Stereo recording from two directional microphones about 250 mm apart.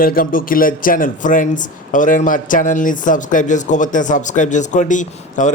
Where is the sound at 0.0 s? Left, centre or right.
Left.